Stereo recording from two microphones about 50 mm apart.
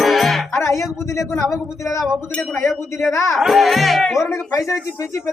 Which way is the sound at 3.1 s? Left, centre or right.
Left.